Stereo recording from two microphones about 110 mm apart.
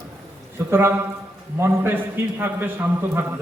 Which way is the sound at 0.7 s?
25° right (ahead or behind).